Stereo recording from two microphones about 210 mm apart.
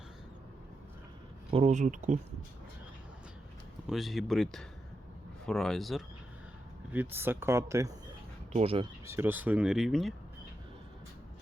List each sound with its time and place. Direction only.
1.5 s speech: 30° right (ahead or behind)
3.8 s speech: centre (ahead or behind)
6.9 s speech: 10° right (ahead or behind)
8.5 s speech: 25° right (ahead or behind)
9.0 s speech: 10° right (ahead or behind)